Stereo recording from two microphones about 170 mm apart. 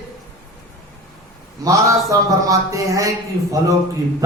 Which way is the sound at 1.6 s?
20° right (ahead or behind).